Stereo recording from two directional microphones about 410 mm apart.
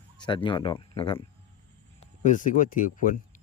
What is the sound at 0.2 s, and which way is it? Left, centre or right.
Speech, centre.